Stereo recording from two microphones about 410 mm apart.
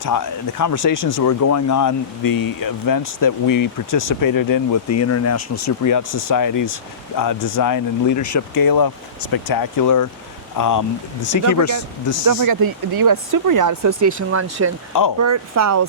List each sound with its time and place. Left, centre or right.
0.0 s speech: left
12.2 s speech: right